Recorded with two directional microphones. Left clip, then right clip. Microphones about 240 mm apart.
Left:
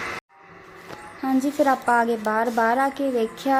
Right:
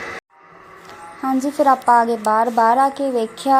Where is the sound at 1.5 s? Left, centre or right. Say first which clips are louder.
Right 7 dB; centre.